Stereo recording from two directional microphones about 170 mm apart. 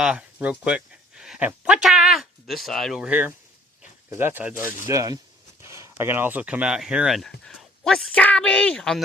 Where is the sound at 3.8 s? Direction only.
15° right (ahead or behind).